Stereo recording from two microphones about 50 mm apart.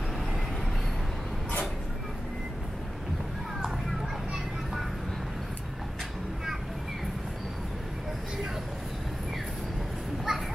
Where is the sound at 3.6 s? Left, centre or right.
Centre.